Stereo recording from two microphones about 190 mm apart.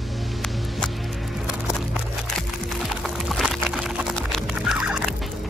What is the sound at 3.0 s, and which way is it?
Music, centre (ahead or behind).